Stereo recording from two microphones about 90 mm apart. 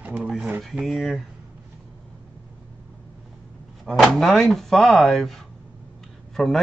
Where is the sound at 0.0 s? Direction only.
15° right (ahead or behind).